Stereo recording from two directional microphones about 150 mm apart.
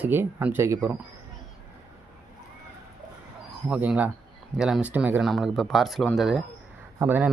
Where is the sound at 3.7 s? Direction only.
10° right (ahead or behind).